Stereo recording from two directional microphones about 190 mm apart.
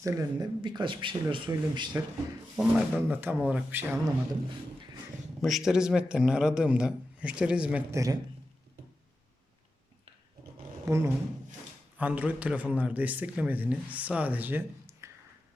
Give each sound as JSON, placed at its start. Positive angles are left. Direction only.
{"t": 0.0, "sound": "speech", "side_deg": -15}
{"t": 2.6, "sound": "a man's voice", "side_deg": -5}
{"t": 5.4, "sound": "a man's voice", "side_deg": 0}
{"t": 10.8, "sound": "a man's voice", "side_deg": -15}